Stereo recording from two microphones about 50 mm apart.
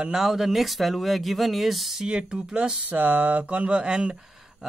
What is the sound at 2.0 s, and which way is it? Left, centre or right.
Speech, centre.